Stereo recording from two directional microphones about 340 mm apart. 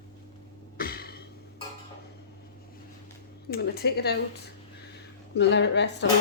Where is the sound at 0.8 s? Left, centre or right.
Left.